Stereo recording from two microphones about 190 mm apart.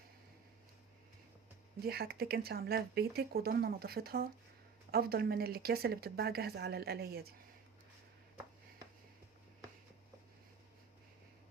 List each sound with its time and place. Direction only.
1.8 s speech: 55° right (ahead or behind)